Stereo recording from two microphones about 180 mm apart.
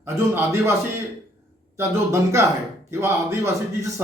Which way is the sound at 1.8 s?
15° right (ahead or behind).